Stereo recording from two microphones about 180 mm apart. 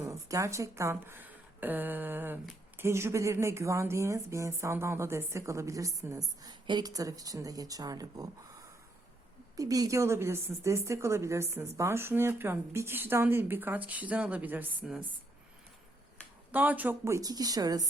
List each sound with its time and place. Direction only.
0.0 s a woman's voice: 15° right (ahead or behind)
9.6 s a woman's voice: 20° right (ahead or behind)
16.5 s a woman's voice: 10° right (ahead or behind)